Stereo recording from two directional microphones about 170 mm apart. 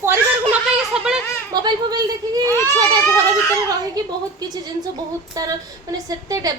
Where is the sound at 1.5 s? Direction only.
25° right (ahead or behind).